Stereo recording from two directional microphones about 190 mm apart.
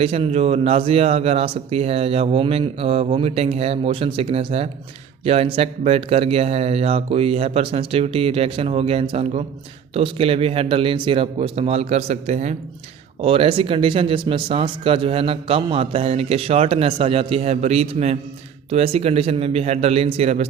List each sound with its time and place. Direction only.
0.0 s speech: 30° right (ahead or behind)